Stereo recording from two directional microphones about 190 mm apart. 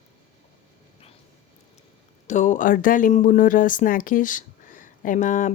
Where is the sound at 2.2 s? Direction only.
40° left (ahead or behind).